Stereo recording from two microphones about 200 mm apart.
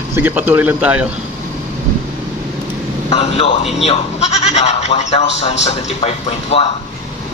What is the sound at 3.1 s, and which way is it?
Speech, 30° left (ahead or behind).